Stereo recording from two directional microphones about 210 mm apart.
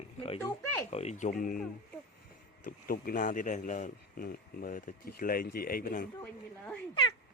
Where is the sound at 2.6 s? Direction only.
40° left (ahead or behind).